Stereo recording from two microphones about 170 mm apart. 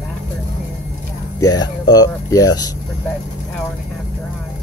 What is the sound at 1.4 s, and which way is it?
Speech, 25° left (ahead or behind).